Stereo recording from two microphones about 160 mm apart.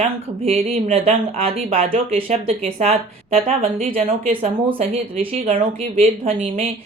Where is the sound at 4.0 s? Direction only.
60° right (ahead or behind).